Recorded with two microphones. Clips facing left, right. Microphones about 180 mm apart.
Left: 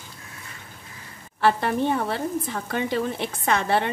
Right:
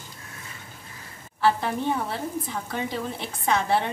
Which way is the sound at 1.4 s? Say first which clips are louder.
Left 2 dB; 60° left (ahead or behind).